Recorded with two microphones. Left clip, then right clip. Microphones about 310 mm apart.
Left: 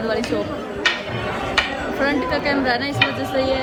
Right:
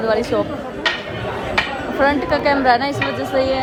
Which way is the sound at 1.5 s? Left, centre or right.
Centre.